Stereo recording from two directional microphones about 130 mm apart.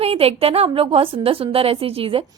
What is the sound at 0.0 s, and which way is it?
A woman's voice, 50° right (ahead or behind).